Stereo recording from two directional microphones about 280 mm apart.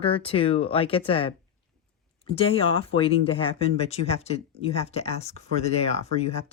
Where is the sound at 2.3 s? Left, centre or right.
Centre.